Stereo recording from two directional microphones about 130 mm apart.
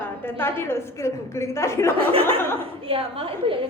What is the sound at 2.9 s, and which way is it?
Speech, 45° right (ahead or behind).